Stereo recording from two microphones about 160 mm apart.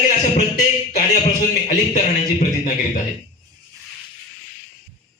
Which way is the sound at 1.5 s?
50° left (ahead or behind).